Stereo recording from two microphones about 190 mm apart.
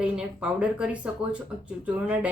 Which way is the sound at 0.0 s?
5° right (ahead or behind).